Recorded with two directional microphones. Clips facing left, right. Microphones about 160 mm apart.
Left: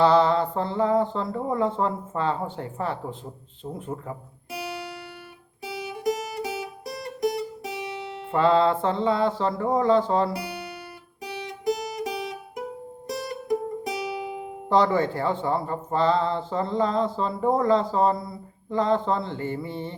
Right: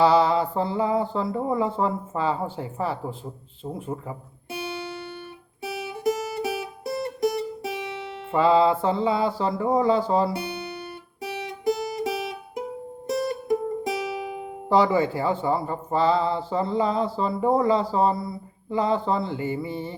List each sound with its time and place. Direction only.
0.0 s speech: 10° right (ahead or behind)
4.5 s music: 25° right (ahead or behind)
8.3 s speech: 5° right (ahead or behind)
10.3 s speech: 25° right (ahead or behind)
11.3 s music: 25° right (ahead or behind)
14.7 s speech: 5° right (ahead or behind)